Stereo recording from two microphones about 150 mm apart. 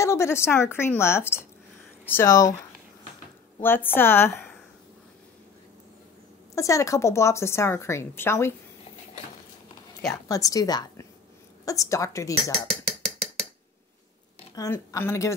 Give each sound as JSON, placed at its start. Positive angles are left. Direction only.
{"t": 0.0, "sound": "a woman's voice", "side_deg": 20}
{"t": 3.6, "sound": "a woman's voice", "side_deg": 15}
{"t": 6.5, "sound": "a woman's voice", "side_deg": 20}
{"t": 10.2, "sound": "speech", "side_deg": 25}
{"t": 14.5, "sound": "speech", "side_deg": 25}